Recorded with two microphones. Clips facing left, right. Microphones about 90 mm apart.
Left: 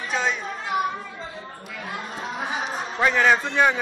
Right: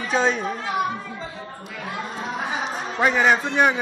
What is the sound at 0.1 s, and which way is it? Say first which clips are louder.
Chatter: right 5 dB; 35° right (ahead or behind).